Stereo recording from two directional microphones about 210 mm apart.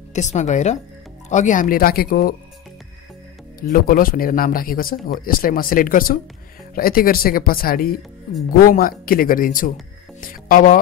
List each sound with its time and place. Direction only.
0.1 s speech: 35° left (ahead or behind)
3.7 s speech: 45° left (ahead or behind)